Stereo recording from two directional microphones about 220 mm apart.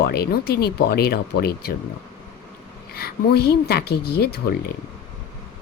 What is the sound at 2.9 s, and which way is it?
Speech, 45° left (ahead or behind).